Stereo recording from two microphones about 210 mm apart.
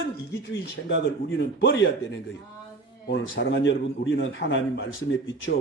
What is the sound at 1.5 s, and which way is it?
Speech, 55° left (ahead or behind).